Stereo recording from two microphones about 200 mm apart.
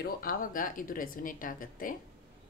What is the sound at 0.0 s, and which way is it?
Speech, 45° left (ahead or behind).